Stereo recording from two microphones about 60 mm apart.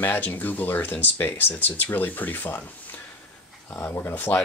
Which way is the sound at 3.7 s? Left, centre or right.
Left.